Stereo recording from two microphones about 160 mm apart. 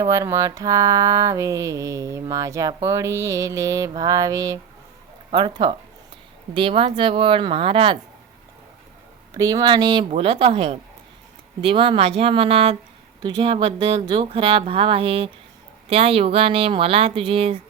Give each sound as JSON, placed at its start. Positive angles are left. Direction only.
{"t": 0.1, "sound": "mantra", "side_deg": -20}
{"t": 5.3, "sound": "speech", "side_deg": -30}
{"t": 9.3, "sound": "mantra", "side_deg": -20}
{"t": 10.1, "sound": "speech", "side_deg": -35}